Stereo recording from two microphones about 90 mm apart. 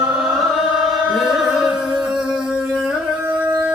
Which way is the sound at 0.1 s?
5° right (ahead or behind).